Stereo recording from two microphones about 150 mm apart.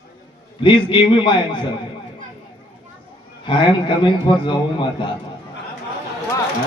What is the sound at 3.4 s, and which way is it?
A man's voice, 35° left (ahead or behind).